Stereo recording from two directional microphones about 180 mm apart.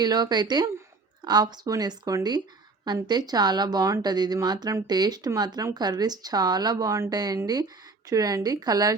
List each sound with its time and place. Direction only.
0.0 s speech: 25° right (ahead or behind)